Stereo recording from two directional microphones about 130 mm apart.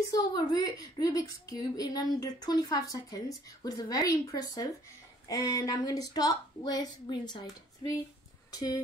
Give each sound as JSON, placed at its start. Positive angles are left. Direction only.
{"t": 0.1, "sound": "a woman's voice", "side_deg": 30}